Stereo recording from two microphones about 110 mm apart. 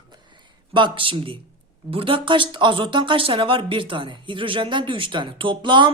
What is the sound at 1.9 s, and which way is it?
Speech, 55° right (ahead or behind).